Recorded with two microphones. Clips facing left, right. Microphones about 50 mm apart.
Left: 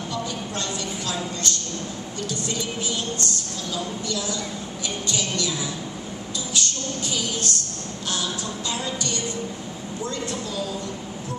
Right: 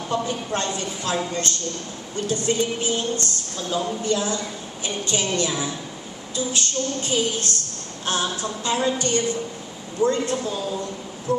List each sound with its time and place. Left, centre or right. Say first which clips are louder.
0.1 s a woman's voice: right 7 dB; right